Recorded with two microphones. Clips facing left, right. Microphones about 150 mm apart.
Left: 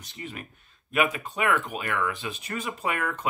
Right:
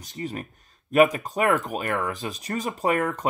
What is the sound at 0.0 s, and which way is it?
Speech, 40° right (ahead or behind).